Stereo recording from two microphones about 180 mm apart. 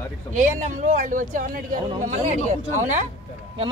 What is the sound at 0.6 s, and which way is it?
Speech, 45° right (ahead or behind).